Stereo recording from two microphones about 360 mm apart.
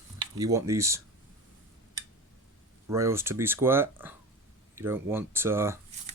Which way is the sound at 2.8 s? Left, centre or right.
Centre.